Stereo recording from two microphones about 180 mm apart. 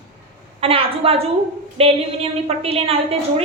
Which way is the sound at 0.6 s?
30° right (ahead or behind).